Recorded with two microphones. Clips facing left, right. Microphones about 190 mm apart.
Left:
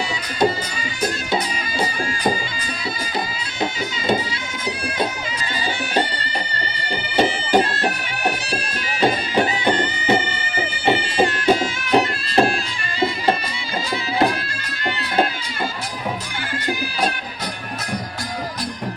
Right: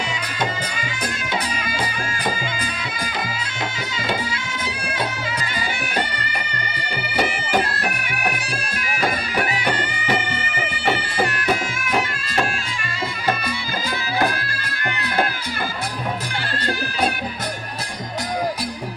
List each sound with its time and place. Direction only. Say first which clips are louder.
5.9 s music: left 3 dB; 30° left (ahead or behind)
7.2 s bagpipes: left 4 dB; 25° left (ahead or behind)
9.0 s music: left 5 dB; 25° left (ahead or behind)